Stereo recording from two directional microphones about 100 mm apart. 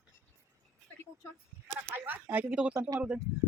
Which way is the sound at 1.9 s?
20° right (ahead or behind).